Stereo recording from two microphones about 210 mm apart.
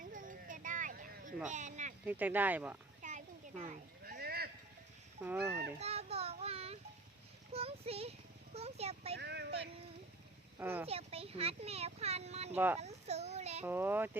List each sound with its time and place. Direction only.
0.0 s a sound: 40° right (ahead or behind)
1.5 s speech: 35° right (ahead or behind)
2.0 s speech: 10° right (ahead or behind)
3.0 s a sound: 35° right (ahead or behind)
5.2 s speech: 10° right (ahead or behind)
5.8 s child singing: 30° right (ahead or behind)
7.5 s a sound: 30° right (ahead or behind)
9.1 s a sound: 50° right (ahead or behind)
10.6 s speech: 10° right (ahead or behind)
10.8 s speech: 30° right (ahead or behind)
12.5 s speech: 10° right (ahead or behind)
12.8 s a child's voice: 30° right (ahead or behind)
13.7 s speech: 10° right (ahead or behind)